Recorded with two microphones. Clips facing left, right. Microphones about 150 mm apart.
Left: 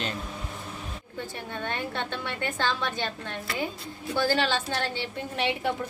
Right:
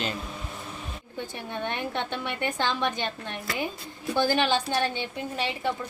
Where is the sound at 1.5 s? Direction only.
20° right (ahead or behind).